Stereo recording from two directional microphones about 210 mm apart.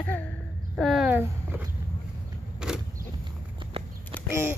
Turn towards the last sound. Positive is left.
turn(degrees=-10)  # may be behind; listen again after turning